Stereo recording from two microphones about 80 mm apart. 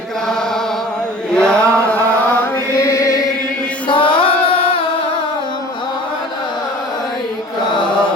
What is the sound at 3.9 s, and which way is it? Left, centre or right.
Music, left.